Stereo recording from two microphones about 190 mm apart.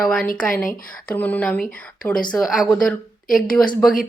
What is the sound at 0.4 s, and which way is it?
Speech, 45° left (ahead or behind).